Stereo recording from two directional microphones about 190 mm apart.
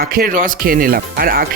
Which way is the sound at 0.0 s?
50° right (ahead or behind).